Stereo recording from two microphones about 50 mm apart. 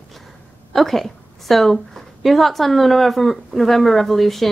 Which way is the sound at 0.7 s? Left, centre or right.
Centre.